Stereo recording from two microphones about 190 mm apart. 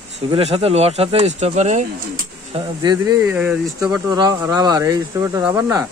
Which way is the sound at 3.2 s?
5° right (ahead or behind).